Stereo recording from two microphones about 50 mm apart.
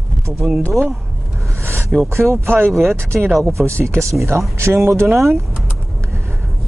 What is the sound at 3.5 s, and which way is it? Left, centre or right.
Speech, right.